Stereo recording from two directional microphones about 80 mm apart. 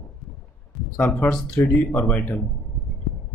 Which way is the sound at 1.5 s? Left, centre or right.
Left.